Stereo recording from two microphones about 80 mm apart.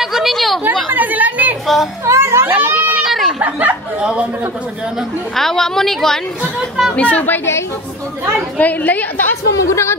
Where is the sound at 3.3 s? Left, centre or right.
Centre.